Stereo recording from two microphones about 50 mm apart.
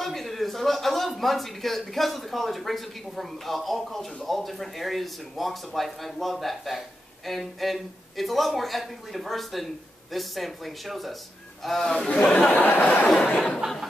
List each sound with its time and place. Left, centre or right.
0.0 s speech: centre
11.9 s speech: centre
12.3 s speech: left
12.8 s a sound: left